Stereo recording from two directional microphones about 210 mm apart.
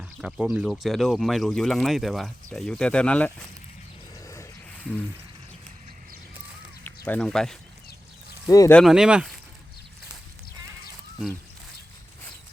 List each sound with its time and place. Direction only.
0.0 s speech: 5° right (ahead or behind)
4.3 s wild animals: 10° left (ahead or behind)
6.8 s speech: 10° left (ahead or behind)
8.4 s speech: 15° left (ahead or behind)
8.8 s speech: centre (ahead or behind)